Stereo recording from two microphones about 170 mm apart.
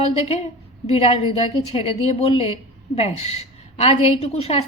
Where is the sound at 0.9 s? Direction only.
35° left (ahead or behind).